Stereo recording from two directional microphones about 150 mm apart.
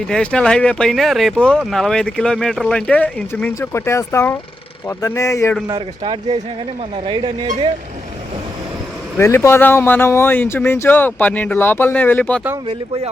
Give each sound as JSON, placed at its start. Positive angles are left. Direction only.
{"t": 0.1, "sound": "speech", "side_deg": 5}
{"t": 5.6, "sound": "speech", "side_deg": -30}
{"t": 9.1, "sound": "speech", "side_deg": 15}